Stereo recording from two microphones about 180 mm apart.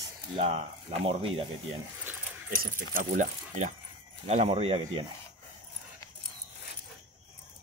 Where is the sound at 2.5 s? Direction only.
55° right (ahead or behind); by 5.0 s 30° right (ahead or behind).